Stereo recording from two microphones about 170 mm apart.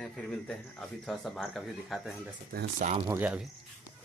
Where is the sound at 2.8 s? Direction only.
45° right (ahead or behind).